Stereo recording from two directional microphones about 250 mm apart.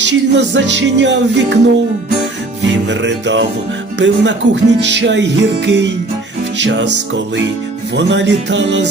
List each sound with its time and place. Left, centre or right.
0.0 s music: right
2.9 s music: right